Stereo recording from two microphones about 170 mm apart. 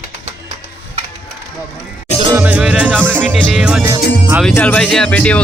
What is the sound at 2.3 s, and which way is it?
Music, 10° right (ahead or behind).